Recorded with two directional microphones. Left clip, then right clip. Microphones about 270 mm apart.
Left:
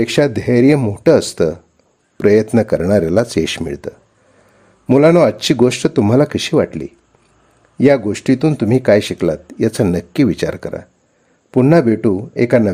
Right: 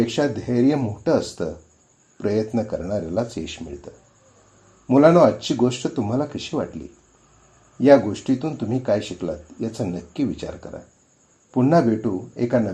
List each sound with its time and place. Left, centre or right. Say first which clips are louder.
0.0 s speech: left 8 dB; left
4.9 s speech: left 4 dB; left
7.8 s speech: left 2 dB; left